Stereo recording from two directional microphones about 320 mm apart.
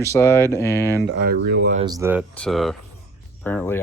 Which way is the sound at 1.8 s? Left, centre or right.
Centre.